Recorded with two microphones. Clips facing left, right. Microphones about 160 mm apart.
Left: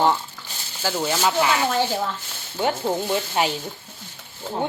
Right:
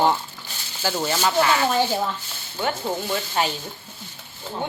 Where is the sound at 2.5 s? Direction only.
25° left (ahead or behind).